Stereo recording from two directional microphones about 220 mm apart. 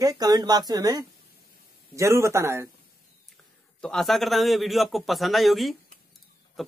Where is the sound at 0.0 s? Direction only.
15° right (ahead or behind).